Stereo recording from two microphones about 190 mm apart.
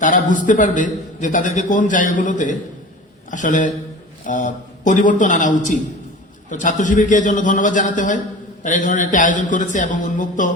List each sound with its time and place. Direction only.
0.0 s a man's voice: 40° left (ahead or behind)